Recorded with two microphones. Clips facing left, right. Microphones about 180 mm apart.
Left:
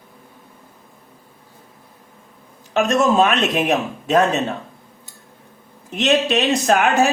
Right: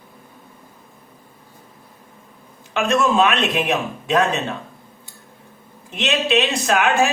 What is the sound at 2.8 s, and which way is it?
Speech, 40° left (ahead or behind).